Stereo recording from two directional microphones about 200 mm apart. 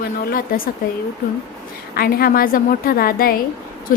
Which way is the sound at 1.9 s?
45° left (ahead or behind).